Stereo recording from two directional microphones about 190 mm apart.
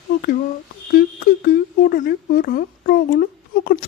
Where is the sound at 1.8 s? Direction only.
55° left (ahead or behind).